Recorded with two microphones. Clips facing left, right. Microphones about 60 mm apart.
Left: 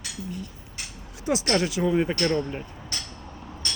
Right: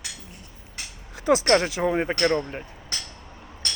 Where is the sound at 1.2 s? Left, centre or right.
Right.